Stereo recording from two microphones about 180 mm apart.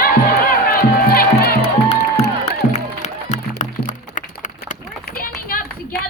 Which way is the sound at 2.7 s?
40° left (ahead or behind).